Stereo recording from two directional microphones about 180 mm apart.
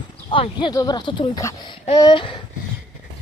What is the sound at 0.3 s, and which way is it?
Speech, 30° left (ahead or behind).